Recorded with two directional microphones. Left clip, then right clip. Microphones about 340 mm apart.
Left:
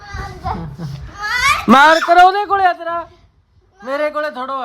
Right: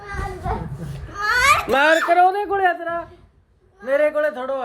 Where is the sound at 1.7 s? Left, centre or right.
Centre.